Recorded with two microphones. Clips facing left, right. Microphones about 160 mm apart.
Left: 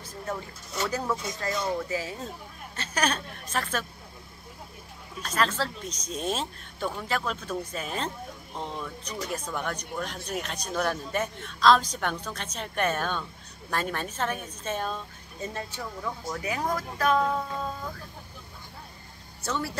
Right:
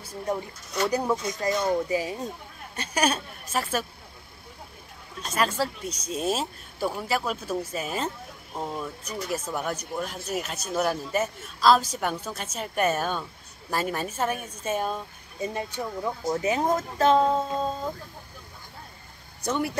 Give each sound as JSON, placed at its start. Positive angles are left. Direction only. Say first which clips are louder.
{"t": 0.0, "sound": "a sound", "louder": "right 5 dB", "side_deg": -10}
{"t": 0.8, "sound": "speech", "louder": "right 4 dB", "side_deg": -15}
{"t": 1.4, "sound": "speech", "louder": "right 5 dB", "side_deg": -25}
{"t": 1.9, "sound": "speech", "louder": "right 5 dB", "side_deg": -15}
{"t": 5.2, "sound": "speech", "louder": "right 2 dB", "side_deg": -10}
{"t": 19.4, "sound": "speech", "louder": "right 4 dB", "side_deg": -15}